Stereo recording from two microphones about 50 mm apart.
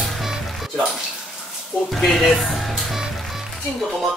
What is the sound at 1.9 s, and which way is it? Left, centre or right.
Speech, centre.